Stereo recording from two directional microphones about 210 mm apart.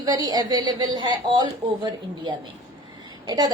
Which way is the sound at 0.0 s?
20° right (ahead or behind).